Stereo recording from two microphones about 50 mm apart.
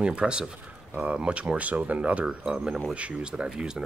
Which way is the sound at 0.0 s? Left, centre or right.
Centre.